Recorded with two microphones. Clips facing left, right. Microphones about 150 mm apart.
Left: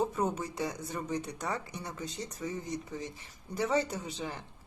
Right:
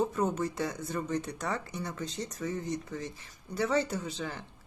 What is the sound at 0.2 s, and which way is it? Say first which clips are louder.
Speech: right 2 dB; 10° left (ahead or behind).